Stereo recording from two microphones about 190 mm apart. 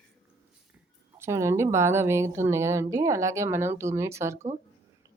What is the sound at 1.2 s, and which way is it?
A woman's voice, 15° right (ahead or behind).